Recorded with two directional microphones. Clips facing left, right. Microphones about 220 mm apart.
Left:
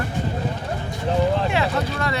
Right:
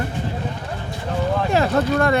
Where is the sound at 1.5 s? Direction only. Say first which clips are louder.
Right 5 dB; 45° right (ahead or behind).